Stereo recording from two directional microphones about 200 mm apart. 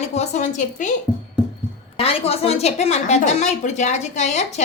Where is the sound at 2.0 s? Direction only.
30° left (ahead or behind).